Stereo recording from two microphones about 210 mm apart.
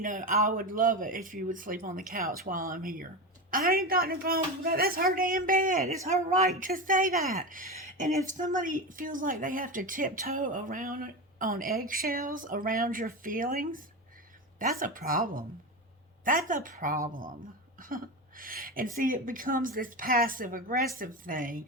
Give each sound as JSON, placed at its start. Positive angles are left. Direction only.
{"t": 0.0, "sound": "a woman's voice", "side_deg": -40}
{"t": 17.7, "sound": "a sound", "side_deg": -40}
{"t": 18.9, "sound": "a woman's voice", "side_deg": -40}